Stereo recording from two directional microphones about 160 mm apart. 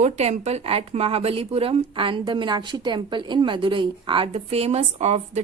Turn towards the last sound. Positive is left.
turn(degrees=-45)  # may be behind; listen again after turning